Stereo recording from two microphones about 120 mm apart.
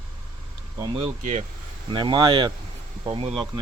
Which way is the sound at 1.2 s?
80° right.